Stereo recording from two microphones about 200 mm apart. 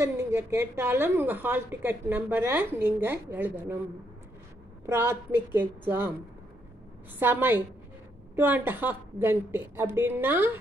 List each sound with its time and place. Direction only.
0.0 s a woman's voice: 10° right (ahead or behind)
4.8 s a woman's voice: 10° right (ahead or behind)
7.2 s a woman's voice: 10° right (ahead or behind)